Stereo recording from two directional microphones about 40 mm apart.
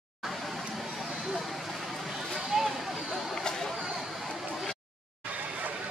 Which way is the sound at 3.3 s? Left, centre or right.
Centre.